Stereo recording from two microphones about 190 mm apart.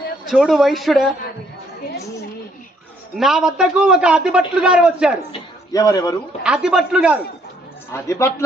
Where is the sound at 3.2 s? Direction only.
Centre (ahead or behind).